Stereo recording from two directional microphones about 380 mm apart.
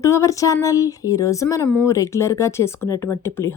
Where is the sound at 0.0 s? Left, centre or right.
Centre.